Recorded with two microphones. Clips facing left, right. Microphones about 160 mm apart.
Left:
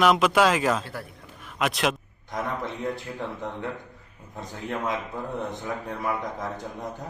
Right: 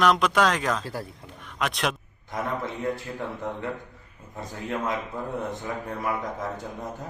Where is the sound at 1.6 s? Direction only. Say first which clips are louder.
Left 2 dB; centre (ahead or behind).